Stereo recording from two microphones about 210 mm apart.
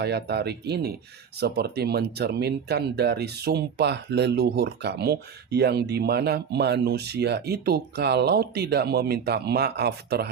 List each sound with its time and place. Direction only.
0.0 s speech: 50° right (ahead or behind)